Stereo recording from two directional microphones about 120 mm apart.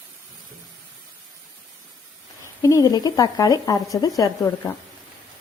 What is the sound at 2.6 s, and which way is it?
Speech, 30° left (ahead or behind).